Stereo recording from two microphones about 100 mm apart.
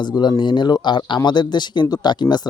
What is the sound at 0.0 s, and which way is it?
Speech, 45° left (ahead or behind).